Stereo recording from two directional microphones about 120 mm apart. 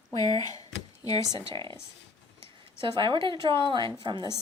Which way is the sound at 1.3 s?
40° right (ahead or behind).